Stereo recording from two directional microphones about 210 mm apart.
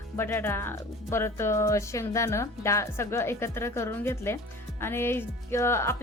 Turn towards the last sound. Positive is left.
turn(degrees=10)  # may be behind; listen again after turning